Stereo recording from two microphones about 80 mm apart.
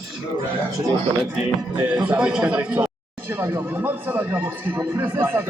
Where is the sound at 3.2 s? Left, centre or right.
Right.